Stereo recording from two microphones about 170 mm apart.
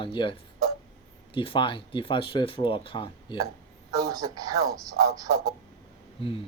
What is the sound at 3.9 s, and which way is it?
Speech, 20° right (ahead or behind).